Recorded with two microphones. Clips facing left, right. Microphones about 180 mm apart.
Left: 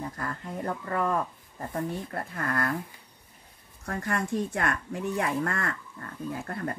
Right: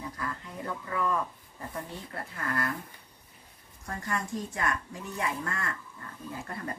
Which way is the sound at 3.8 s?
65° left (ahead or behind).